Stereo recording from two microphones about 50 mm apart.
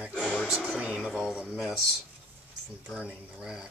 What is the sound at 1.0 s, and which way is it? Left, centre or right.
Speech, centre.